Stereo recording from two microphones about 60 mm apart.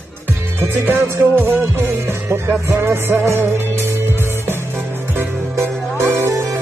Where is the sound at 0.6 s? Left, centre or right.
Right.